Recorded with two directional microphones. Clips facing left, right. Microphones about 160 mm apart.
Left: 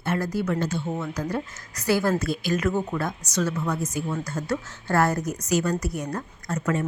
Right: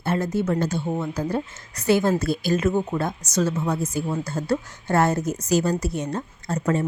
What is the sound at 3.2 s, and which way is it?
Speech, 45° right (ahead or behind).